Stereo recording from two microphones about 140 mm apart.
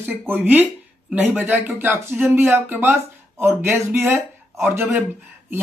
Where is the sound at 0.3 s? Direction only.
15° right (ahead or behind).